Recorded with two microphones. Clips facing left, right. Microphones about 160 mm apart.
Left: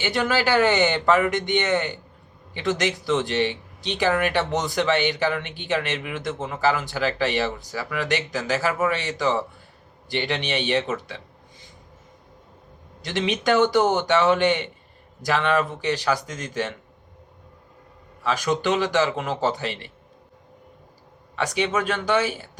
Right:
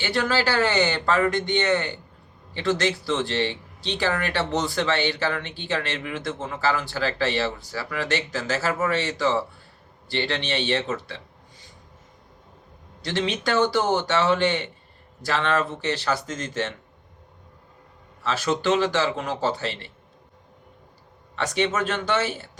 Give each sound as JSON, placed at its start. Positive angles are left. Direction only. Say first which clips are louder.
{"t": 0.0, "sound": "speech", "louder": "left 1 dB", "side_deg": 15}
{"t": 13.0, "sound": "speech", "louder": "left 1 dB", "side_deg": 20}
{"t": 18.2, "sound": "speech", "louder": "left 1 dB", "side_deg": 15}
{"t": 21.3, "sound": "speech", "louder": "even", "side_deg": 10}